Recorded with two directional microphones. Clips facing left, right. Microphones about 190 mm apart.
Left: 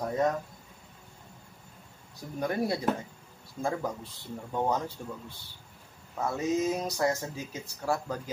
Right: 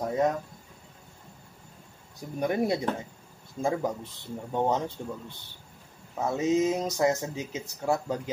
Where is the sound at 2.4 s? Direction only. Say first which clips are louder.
Right 3 dB; 20° right (ahead or behind).